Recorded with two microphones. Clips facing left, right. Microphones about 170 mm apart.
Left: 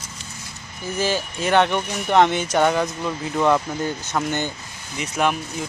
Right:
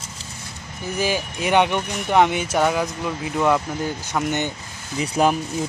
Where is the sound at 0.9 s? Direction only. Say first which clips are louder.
Even; 10° right (ahead or behind).